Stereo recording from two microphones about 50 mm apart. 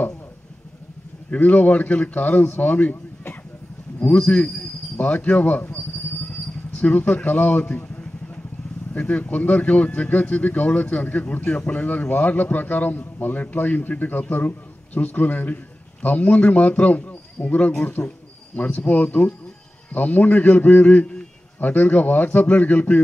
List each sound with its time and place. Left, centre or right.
1.3 s a man's voice: left
6.8 s speech: left
7.6 s a sound: left
8.9 s a man's voice: left